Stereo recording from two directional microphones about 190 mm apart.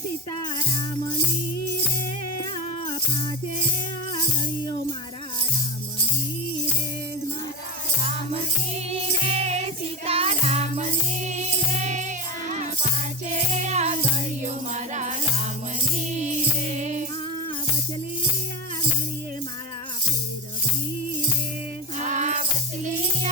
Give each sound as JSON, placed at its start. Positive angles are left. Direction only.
{"t": 8.9, "sound": "music", "side_deg": -30}
{"t": 22.0, "sound": "music", "side_deg": -40}